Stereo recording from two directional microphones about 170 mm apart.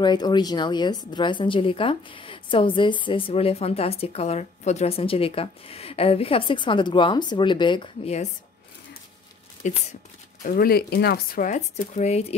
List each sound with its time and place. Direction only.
0.0 s a woman's voice: 25° left (ahead or behind)
9.6 s speech: 45° left (ahead or behind)
10.4 s speech: 55° left (ahead or behind); by 12.4 s 40° left (ahead or behind)